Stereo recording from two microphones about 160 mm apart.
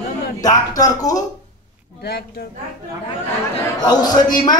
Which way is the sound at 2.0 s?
85° left.